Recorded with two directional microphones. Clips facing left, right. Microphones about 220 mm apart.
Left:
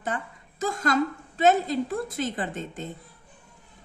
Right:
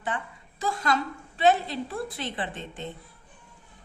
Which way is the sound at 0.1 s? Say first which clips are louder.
Left 1 dB; 40° left (ahead or behind).